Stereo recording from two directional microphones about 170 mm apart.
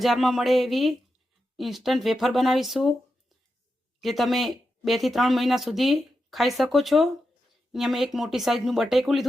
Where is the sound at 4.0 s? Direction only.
Centre (ahead or behind).